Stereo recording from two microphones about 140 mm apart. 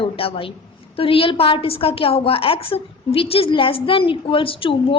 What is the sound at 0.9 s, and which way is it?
A woman's voice, 40° left (ahead or behind).